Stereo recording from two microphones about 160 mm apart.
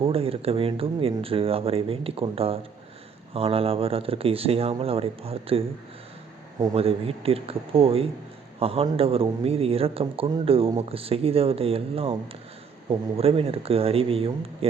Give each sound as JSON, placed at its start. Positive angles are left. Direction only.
{"t": 0.0, "sound": "speech", "side_deg": -35}
{"t": 6.7, "sound": "speech", "side_deg": -35}